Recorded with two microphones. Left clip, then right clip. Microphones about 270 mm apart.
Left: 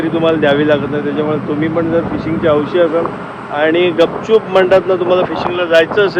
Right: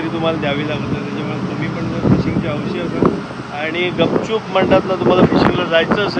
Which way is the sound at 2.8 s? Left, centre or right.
Centre.